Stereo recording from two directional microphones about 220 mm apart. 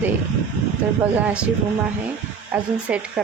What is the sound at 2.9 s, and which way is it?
Speech, 5° right (ahead or behind).